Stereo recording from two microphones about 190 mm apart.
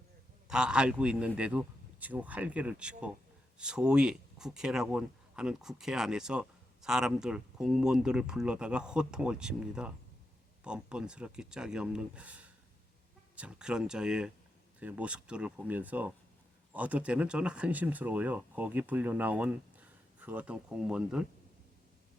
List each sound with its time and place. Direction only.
0.4 s speech: 5° right (ahead or behind)